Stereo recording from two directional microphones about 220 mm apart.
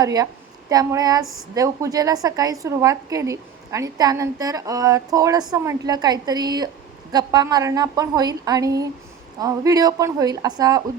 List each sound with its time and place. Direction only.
0.0 s a woman's voice: 15° right (ahead or behind)
1.2 s speech: centre (ahead or behind)
1.5 s a woman's voice: 15° right (ahead or behind)